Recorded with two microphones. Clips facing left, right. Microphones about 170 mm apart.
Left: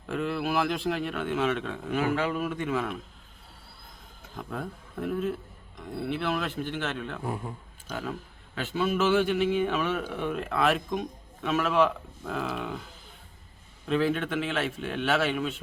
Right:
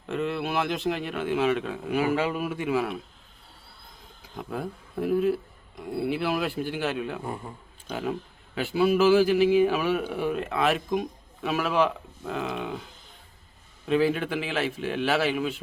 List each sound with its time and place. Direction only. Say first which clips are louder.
0.1 s speech: right 1 dB; centre (ahead or behind)
4.2 s speech: right 3 dB; 5° right (ahead or behind)
7.3 s speech: left 1 dB; centre (ahead or behind)
7.9 s speech: right 4 dB; 15° right (ahead or behind)
13.8 s speech: right 3 dB; 5° right (ahead or behind)